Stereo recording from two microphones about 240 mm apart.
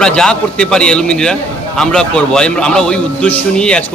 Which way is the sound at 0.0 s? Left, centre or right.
Centre.